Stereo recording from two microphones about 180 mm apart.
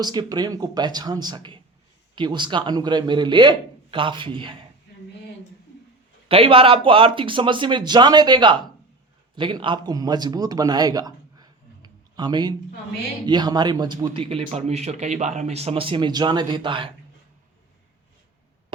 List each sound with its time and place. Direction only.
0.0 s a man's voice: 25° right (ahead or behind)
6.2 s a man's voice: 30° right (ahead or behind)